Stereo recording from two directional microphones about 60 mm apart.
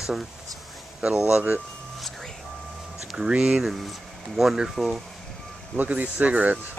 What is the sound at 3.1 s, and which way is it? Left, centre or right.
Speech, centre.